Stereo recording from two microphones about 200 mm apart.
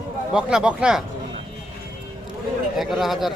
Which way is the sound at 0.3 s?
5° right (ahead or behind).